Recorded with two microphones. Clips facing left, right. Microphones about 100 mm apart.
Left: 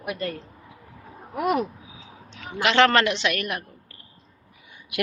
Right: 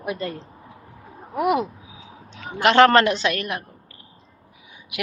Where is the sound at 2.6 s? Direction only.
40° right (ahead or behind).